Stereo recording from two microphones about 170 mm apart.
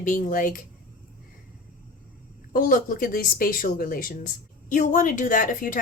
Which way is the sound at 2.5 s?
55° left (ahead or behind).